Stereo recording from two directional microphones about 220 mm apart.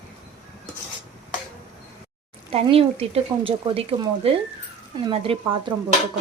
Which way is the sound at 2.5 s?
25° right (ahead or behind).